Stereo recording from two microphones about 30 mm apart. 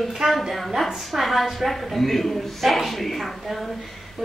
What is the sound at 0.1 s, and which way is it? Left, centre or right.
A woman's voice, centre.